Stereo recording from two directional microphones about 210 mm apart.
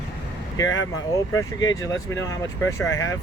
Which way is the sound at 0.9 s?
15° left (ahead or behind).